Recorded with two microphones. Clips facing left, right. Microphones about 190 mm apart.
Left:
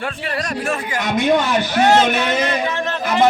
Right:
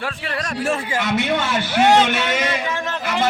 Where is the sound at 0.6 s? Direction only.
30° right (ahead or behind).